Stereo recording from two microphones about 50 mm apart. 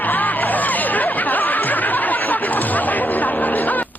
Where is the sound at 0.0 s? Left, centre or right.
Left.